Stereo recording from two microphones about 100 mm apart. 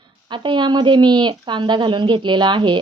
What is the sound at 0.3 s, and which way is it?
Speech, 50° right (ahead or behind).